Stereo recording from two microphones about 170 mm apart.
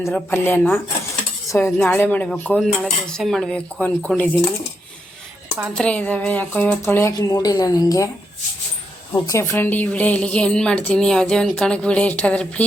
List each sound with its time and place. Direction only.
0.0 s a woman's voice: 10° left (ahead or behind)
1.5 s cutlery: 15° left (ahead or behind)
1.8 s speech: 5° left (ahead or behind)
5.7 s a woman's voice: 5° left (ahead or behind)
9.2 s a woman's voice: 15° left (ahead or behind)